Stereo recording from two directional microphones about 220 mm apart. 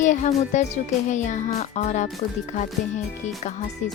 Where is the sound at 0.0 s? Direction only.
35° left (ahead or behind).